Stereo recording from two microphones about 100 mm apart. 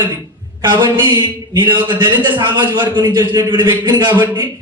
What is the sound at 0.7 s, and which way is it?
A man's voice, 50° right (ahead or behind).